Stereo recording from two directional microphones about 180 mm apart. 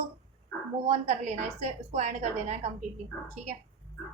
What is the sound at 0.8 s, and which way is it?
A woman's voice, 40° right (ahead or behind).